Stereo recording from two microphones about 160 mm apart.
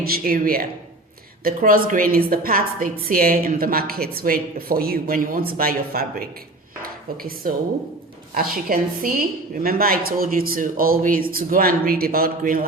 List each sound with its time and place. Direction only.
0.0 s a woman's voice: 65° right (ahead or behind)